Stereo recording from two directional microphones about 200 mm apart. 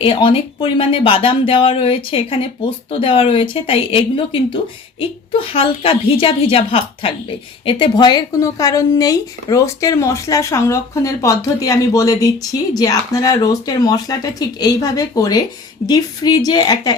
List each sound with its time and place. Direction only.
0.0 s a woman's voice: 25° left (ahead or behind)